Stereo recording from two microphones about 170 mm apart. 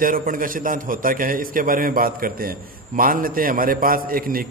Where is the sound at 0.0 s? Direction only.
55° right (ahead or behind).